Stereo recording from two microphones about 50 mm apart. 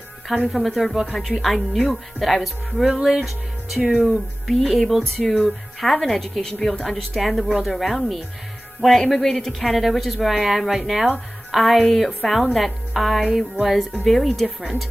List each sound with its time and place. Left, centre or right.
0.5 s speech: centre